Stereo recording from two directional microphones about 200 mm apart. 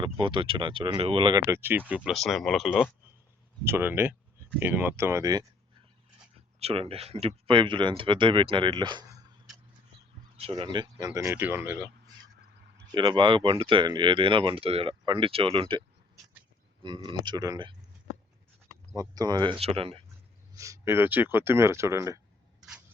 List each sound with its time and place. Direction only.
0.0 s speech: 25° right (ahead or behind)
2.0 s speech: centre (ahead or behind)
3.6 s speech: 10° right (ahead or behind)
6.6 s speech: 30° right (ahead or behind)
10.4 s speech: 25° right (ahead or behind)
16.8 s speech: 25° right (ahead or behind)
18.9 s speech: 20° right (ahead or behind)
20.6 s speech: 15° right (ahead or behind)